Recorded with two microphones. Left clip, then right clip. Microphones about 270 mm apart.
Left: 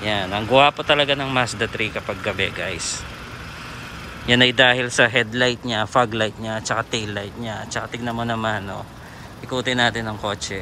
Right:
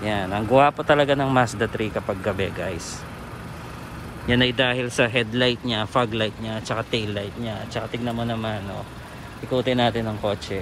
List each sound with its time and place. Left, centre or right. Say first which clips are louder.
0.0 s speech: left 2 dB; centre
4.3 s speech: left 6 dB; centre